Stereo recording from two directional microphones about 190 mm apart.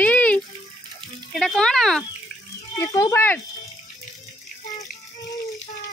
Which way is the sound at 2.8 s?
20° left (ahead or behind).